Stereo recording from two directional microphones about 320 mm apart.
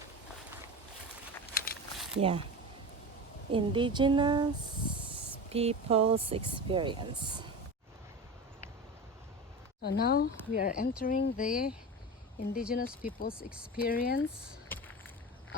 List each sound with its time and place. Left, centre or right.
2.0 s a sound: centre
3.5 s speech: centre
5.5 s speech: centre
9.8 s speech: left
13.3 s speech: centre
13.7 s speech: left